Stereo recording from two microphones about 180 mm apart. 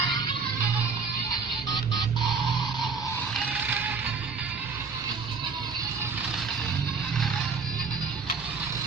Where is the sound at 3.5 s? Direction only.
10° right (ahead or behind).